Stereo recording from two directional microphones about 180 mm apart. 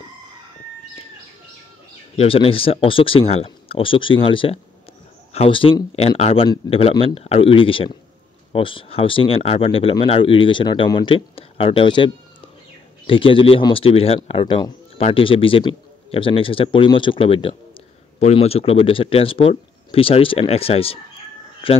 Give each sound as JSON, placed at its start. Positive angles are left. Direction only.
{"t": 2.1, "sound": "a man's voice", "side_deg": 30}